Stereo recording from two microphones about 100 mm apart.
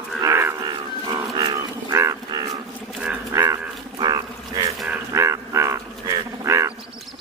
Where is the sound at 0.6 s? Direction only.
45° right (ahead or behind).